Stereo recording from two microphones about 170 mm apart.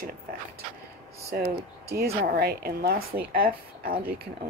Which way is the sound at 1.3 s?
60° right (ahead or behind).